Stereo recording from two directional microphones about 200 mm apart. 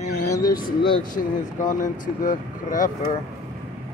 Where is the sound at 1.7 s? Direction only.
40° left (ahead or behind).